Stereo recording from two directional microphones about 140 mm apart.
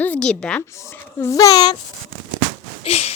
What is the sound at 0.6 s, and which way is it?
Speech, 20° left (ahead or behind).